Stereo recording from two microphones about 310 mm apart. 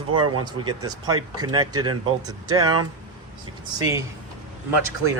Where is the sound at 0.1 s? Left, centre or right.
Right.